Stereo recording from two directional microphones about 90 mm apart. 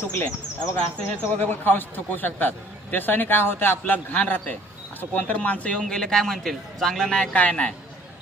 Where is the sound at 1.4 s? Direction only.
20° left (ahead or behind).